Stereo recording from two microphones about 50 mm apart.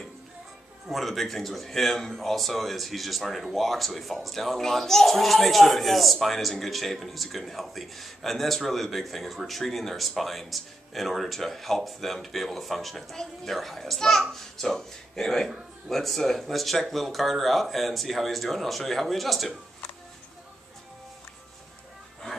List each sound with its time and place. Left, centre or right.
0.8 s speech: centre